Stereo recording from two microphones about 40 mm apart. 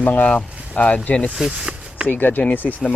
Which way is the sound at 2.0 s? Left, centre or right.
Left.